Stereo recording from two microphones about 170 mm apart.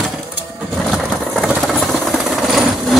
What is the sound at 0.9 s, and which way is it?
Jackhammer, centre (ahead or behind).